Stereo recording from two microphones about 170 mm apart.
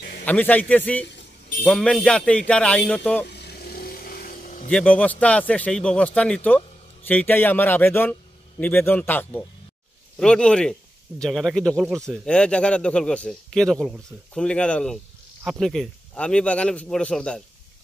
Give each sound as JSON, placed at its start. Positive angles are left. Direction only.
{"t": 0.2, "sound": "a man's voice", "side_deg": 10}
{"t": 3.3, "sound": "vehicle", "side_deg": 70}
{"t": 4.6, "sound": "a man's voice", "side_deg": 10}